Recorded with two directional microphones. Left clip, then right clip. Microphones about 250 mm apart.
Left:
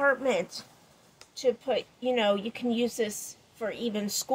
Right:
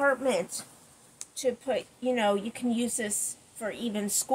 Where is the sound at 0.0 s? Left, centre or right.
Left.